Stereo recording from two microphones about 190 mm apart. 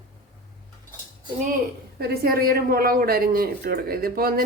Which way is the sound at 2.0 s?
55° right (ahead or behind).